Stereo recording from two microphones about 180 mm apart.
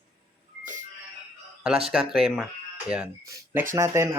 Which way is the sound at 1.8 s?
Centre (ahead or behind).